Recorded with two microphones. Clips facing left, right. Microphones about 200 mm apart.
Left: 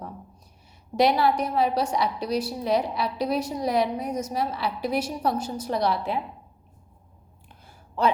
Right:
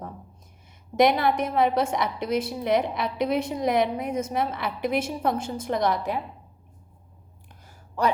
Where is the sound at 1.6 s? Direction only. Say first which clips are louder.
Right 1 dB; 20° right (ahead or behind).